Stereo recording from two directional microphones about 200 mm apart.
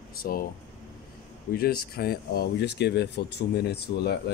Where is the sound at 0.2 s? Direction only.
45° left (ahead or behind).